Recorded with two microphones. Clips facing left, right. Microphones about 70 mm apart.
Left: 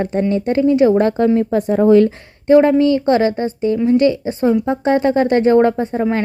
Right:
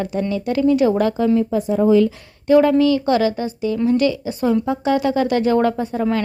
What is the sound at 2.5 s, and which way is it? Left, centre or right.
A woman's voice, left.